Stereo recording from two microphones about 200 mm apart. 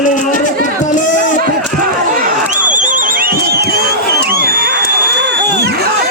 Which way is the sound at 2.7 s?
40° right (ahead or behind).